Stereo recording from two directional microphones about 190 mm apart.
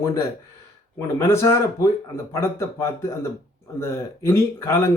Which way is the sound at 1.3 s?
15° left (ahead or behind).